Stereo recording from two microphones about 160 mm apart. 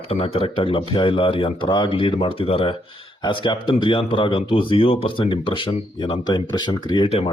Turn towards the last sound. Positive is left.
turn(degrees=30)  # may be behind; listen again after turning